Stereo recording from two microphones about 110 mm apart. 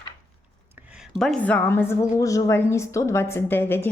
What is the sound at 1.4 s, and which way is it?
A woman's voice, 15° left (ahead or behind).